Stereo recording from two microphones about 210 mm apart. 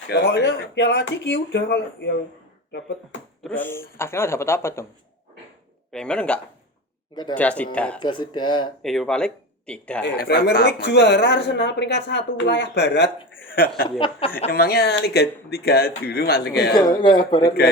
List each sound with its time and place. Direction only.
0.1 s speech: 55° left (ahead or behind)
3.4 s speech: 10° left (ahead or behind)
5.9 s speech: 5° left (ahead or behind)
7.9 s speech: 25° left (ahead or behind)
8.8 s speech: centre (ahead or behind)
10.2 s speech: 45° left (ahead or behind)
13.5 s speech: 45° left (ahead or behind)
14.0 s speech: 25° left (ahead or behind)
14.5 s speech: 45° left (ahead or behind)
16.7 s speech: 20° left (ahead or behind)